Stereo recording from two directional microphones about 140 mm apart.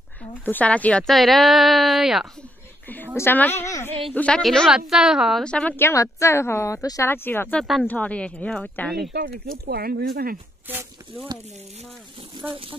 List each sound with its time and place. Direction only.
0.3 s speech: 10° left (ahead or behind)
3.2 s a woman's voice: 15° left (ahead or behind)
4.1 s a woman's voice: 10° left (ahead or behind)
7.5 s speech: centre (ahead or behind)
7.8 s a woman's voice: 10° left (ahead or behind)
9.1 s speech: 90° right
12.4 s speech: 40° right (ahead or behind)